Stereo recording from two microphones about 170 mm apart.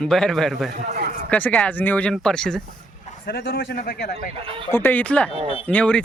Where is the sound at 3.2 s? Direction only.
65° left (ahead or behind).